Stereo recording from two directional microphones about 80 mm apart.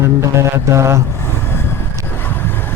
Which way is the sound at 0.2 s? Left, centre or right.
Right.